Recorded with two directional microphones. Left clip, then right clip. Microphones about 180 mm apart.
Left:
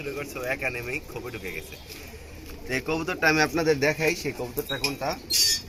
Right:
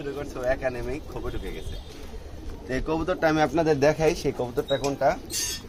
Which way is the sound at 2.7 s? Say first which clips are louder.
Right 1 dB; 15° right (ahead or behind).